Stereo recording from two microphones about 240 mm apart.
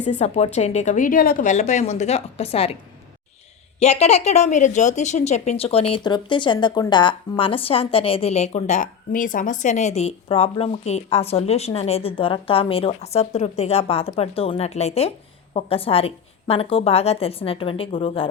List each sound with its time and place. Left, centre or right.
0.2 s a woman's voice: left
3.8 s a woman's voice: left